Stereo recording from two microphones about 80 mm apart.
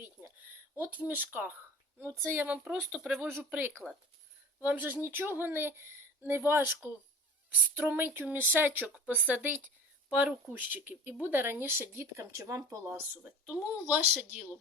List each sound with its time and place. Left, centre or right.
0.8 s speech: centre
2.0 s a woman's voice: right
2.4 s speech: right
3.2 s speech: right
3.7 s speech: centre
4.6 s speech: right
7.8 s speech: right
13.5 s speech: centre